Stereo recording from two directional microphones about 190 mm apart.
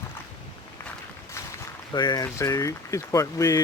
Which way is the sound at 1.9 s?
20° left (ahead or behind).